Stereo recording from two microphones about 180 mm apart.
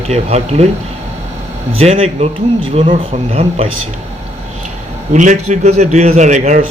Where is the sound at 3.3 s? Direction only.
35° right (ahead or behind).